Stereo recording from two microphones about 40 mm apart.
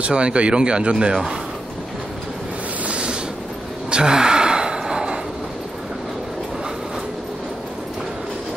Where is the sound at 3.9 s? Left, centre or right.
Centre.